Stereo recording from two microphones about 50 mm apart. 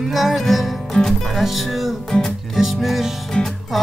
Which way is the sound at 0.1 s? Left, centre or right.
Centre.